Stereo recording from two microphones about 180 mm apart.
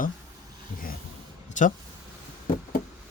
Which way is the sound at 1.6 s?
45° left (ahead or behind).